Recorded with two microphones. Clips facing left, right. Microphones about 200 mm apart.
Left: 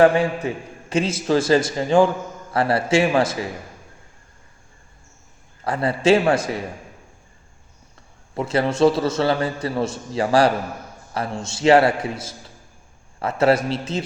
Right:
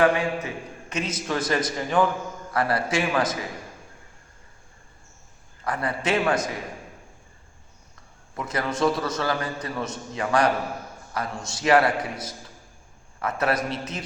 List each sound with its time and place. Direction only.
0.0 s a man's voice: 30° left (ahead or behind)
5.6 s a man's voice: 30° left (ahead or behind)
8.4 s a man's voice: 30° left (ahead or behind)